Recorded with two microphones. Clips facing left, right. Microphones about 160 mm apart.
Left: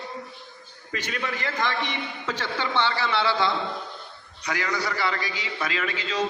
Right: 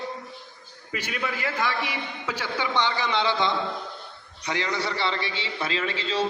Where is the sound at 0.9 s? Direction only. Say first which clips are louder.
Even; 10° right (ahead or behind).